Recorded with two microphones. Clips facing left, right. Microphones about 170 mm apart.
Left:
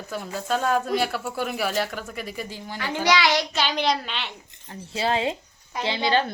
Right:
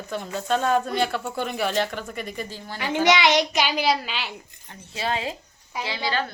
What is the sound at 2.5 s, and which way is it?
Speech, 15° left (ahead or behind).